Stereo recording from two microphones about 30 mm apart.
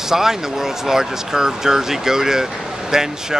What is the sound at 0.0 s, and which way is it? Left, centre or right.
Speech, centre.